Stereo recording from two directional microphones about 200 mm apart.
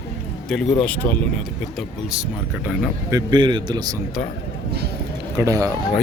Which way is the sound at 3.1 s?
20° right (ahead or behind).